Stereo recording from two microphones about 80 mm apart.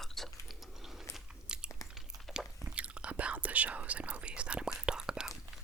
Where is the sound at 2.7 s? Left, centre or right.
Centre.